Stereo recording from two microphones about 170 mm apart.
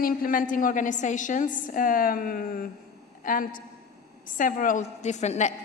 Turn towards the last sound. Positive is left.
turn(degrees=45)  # may be behind; listen again after turning